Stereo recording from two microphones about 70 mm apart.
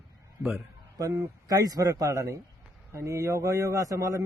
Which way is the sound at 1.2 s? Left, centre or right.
Right.